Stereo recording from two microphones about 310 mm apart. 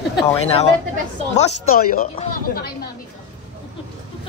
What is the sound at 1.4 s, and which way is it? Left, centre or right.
Speech, left.